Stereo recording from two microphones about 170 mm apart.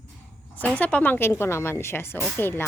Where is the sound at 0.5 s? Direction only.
10° left (ahead or behind).